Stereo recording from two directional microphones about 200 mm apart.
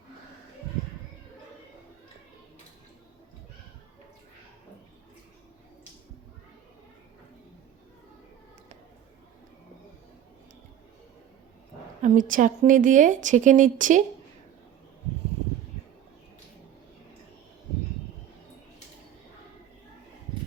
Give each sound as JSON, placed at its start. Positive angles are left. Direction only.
{"t": 12.0, "sound": "a woman's voice", "side_deg": -40}